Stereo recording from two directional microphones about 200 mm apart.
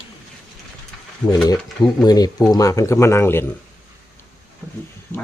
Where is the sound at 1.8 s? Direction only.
20° left (ahead or behind).